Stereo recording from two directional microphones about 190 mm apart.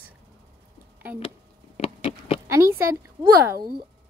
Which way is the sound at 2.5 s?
15° right (ahead or behind).